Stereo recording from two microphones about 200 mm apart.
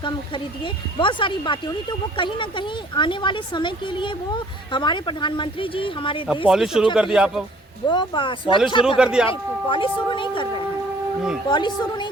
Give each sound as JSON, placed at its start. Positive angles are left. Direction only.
{"t": 0.6, "sound": "speech", "side_deg": 25}
{"t": 6.5, "sound": "speech", "side_deg": 0}
{"t": 7.9, "sound": "speech", "side_deg": 25}
{"t": 9.0, "sound": "speech", "side_deg": -5}
{"t": 9.6, "sound": "speech", "side_deg": 25}